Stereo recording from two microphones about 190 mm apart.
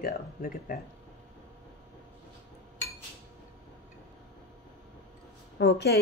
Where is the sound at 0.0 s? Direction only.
50° left (ahead or behind).